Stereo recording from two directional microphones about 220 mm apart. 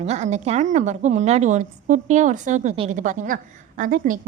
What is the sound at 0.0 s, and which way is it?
A woman's voice, 30° right (ahead or behind).